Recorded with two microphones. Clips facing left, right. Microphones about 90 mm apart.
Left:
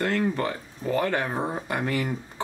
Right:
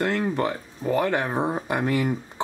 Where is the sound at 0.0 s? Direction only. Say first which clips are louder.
Right 1 dB; 20° right (ahead or behind).